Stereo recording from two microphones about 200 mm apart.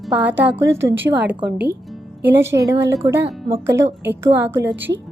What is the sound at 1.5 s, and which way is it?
Speech, 55° right (ahead or behind).